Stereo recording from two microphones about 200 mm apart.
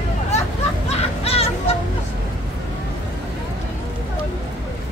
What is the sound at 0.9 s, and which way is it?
Music, 30° left (ahead or behind).